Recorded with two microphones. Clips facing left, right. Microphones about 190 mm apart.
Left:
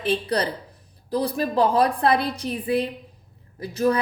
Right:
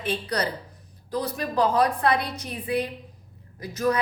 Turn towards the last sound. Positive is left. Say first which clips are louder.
# left 3 dB
turn(degrees=30)  # may be behind; listen again after turning